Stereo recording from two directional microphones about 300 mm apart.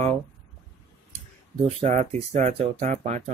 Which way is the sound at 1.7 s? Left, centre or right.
Right.